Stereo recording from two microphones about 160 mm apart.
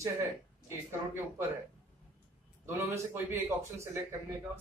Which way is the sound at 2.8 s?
15° right (ahead or behind).